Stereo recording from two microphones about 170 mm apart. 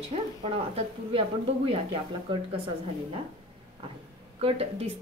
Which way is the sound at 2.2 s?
30° right (ahead or behind).